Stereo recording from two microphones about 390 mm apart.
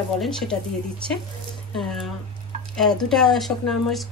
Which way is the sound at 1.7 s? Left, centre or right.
Centre.